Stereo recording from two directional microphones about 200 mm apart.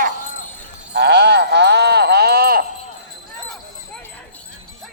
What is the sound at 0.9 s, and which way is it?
Sheep, 55° right (ahead or behind).